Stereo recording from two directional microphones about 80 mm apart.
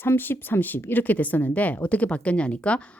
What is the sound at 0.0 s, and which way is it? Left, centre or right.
Speech, left.